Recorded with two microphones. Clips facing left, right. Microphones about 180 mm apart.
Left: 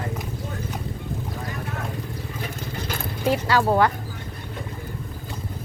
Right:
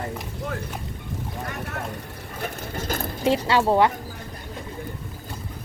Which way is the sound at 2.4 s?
45° right (ahead or behind).